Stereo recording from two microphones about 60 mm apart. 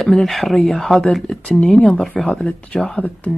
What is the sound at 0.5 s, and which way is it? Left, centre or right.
Speech, centre.